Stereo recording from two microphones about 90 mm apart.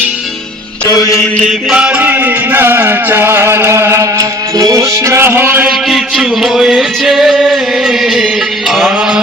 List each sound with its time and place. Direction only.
0.9 s mantra: 40° left (ahead or behind)
1.5 s mantra: 10° right (ahead or behind)
5.6 s music: 5° right (ahead or behind)
8.7 s mantra: 5° right (ahead or behind)